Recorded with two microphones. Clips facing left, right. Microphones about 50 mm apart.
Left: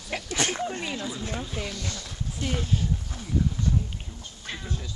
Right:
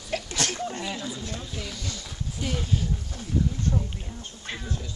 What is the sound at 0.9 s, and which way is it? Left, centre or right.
Speech, centre.